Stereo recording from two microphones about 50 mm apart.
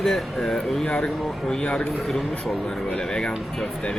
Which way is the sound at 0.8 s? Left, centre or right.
Centre.